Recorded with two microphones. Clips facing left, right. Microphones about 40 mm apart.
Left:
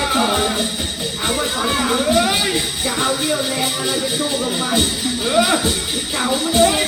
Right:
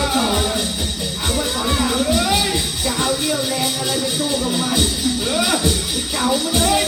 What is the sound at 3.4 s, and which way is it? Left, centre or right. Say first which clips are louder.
Speech: even; centre.